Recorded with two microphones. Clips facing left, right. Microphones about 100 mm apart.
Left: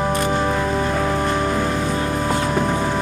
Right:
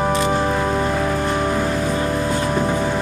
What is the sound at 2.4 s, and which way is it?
Vehicle, 5° right (ahead or behind).